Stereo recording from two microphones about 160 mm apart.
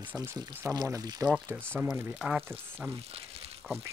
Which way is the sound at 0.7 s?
25° right (ahead or behind).